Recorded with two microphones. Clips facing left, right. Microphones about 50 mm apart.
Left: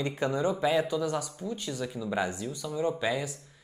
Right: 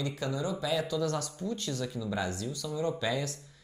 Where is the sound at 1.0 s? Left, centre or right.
Centre.